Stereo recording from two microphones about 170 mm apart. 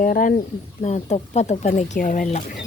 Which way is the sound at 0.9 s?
40° left (ahead or behind).